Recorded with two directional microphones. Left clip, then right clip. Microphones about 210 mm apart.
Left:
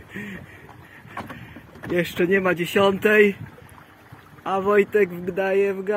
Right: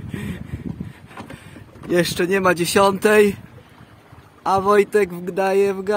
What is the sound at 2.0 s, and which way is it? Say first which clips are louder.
Speech: right 2 dB; 30° right (ahead or behind).